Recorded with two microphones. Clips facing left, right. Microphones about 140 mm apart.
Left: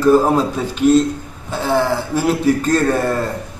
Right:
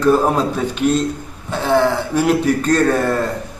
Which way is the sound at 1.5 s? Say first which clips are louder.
Right 2 dB; 5° left (ahead or behind).